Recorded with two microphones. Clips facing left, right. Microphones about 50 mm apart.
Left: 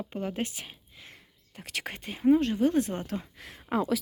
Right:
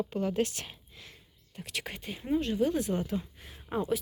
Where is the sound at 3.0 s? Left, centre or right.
Left.